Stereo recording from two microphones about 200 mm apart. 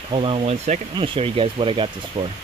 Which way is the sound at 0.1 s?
30° right (ahead or behind).